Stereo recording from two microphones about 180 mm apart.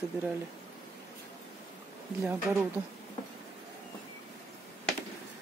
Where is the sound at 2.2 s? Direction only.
10° right (ahead or behind).